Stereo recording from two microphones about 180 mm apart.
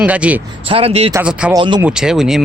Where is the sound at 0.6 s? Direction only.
30° right (ahead or behind).